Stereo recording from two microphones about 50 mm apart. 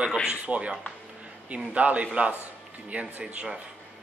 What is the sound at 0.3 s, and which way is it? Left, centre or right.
Speech, right.